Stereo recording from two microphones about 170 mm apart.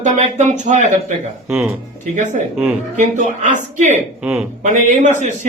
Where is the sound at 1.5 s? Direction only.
10° right (ahead or behind).